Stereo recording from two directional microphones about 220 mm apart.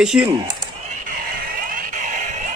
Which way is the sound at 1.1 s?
40° right (ahead or behind).